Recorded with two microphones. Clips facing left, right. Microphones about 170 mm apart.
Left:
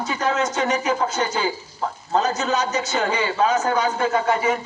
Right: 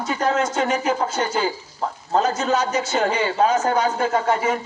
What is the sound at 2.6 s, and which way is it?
A man's voice, 45° right (ahead or behind).